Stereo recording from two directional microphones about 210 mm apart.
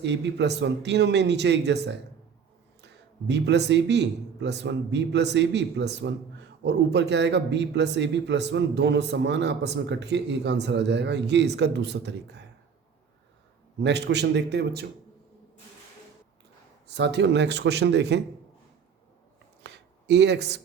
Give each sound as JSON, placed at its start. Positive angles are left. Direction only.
{"t": 0.0, "sound": "a man's voice", "side_deg": -55}
{"t": 13.8, "sound": "a man's voice", "side_deg": -55}
{"t": 16.8, "sound": "a man's voice", "side_deg": -55}
{"t": 19.6, "sound": "a sound", "side_deg": -55}